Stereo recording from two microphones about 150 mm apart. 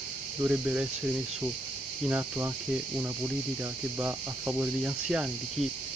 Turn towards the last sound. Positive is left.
turn(degrees=-10)  # may be behind; listen again after turning